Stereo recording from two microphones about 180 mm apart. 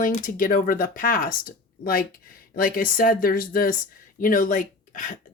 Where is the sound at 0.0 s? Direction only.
50° left (ahead or behind).